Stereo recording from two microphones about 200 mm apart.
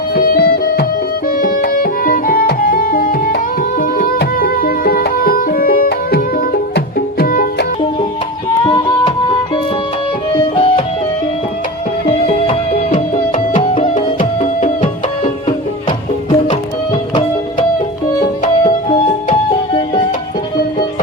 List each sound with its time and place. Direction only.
0.2 s music: 50° left (ahead or behind)
8.6 s music: 25° left (ahead or behind)
10.5 s music: 25° left (ahead or behind)
12.2 s music: 35° left (ahead or behind)
16.3 s music: 25° left (ahead or behind)
18.2 s music: 35° left (ahead or behind)